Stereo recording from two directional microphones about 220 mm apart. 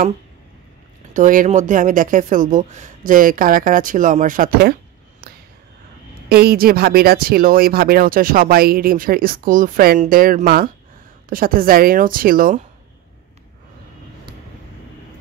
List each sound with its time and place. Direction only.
1.1 s speech: 35° right (ahead or behind)
6.2 s speech: 45° right (ahead or behind)